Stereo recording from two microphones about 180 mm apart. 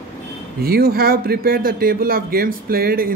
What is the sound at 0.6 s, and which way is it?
Speech, 60° right (ahead or behind).